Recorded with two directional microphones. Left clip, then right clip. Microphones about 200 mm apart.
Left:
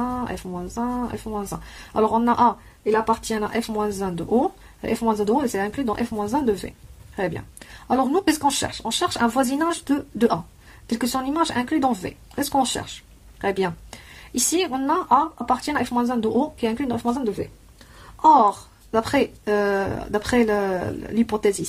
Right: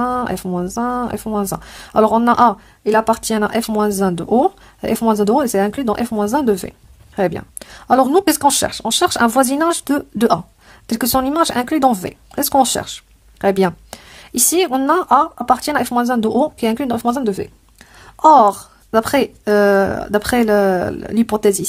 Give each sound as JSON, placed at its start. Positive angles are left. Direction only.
{"t": 0.0, "sound": "speech", "side_deg": -40}